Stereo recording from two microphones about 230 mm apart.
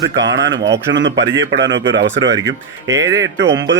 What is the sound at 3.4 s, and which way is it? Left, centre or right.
Speech, right.